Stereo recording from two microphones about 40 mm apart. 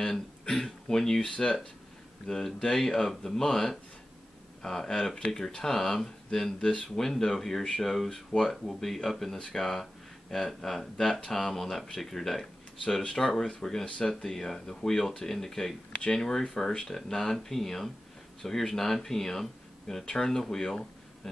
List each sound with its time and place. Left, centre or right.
0.0 s speech: centre
6.6 s speech: left
7.0 s speech: centre